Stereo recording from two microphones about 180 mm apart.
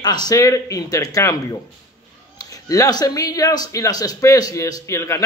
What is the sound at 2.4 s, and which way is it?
Speech, 20° left (ahead or behind).